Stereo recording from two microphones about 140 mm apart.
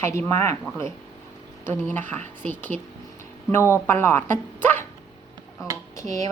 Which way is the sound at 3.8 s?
15° left (ahead or behind).